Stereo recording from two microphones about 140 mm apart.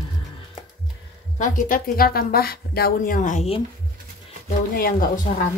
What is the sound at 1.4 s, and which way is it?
A woman's voice, 65° left (ahead or behind).